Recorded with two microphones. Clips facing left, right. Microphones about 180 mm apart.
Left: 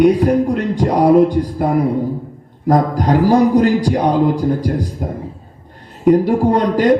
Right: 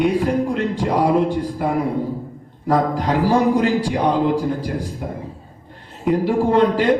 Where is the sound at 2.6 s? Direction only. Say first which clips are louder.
Left 4 dB; 40° left (ahead or behind).